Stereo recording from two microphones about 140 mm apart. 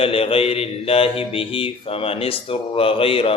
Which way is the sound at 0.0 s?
40° left (ahead or behind).